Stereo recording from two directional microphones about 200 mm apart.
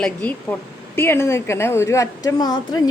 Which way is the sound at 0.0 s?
5° left (ahead or behind).